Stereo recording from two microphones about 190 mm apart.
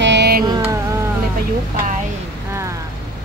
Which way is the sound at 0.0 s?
65° right (ahead or behind).